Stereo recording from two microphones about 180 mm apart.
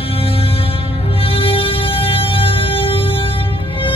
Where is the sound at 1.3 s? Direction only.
30° left (ahead or behind).